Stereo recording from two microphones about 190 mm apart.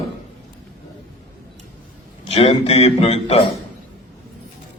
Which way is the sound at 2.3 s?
30° left (ahead or behind).